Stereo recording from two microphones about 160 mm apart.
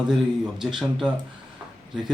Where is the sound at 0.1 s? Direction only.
Centre (ahead or behind).